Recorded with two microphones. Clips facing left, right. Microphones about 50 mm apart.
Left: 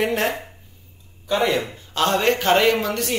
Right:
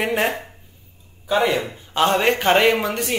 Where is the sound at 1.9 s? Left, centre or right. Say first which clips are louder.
Right 2 dB; centre.